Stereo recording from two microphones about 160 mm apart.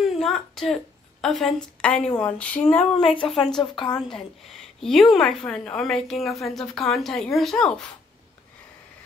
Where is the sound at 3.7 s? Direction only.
30° left (ahead or behind).